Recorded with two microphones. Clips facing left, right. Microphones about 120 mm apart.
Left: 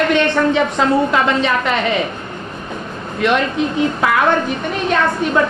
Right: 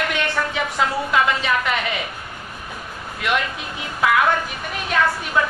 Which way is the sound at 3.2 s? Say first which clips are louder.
Left 7 dB; 30° left (ahead or behind).